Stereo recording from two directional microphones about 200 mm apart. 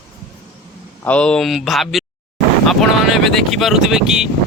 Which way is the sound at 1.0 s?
5° left (ahead or behind).